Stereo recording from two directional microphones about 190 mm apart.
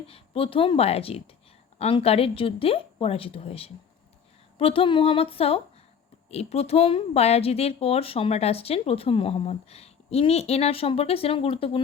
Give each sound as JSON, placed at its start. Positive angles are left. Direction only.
{"t": 0.1, "sound": "a woman's voice", "side_deg": 30}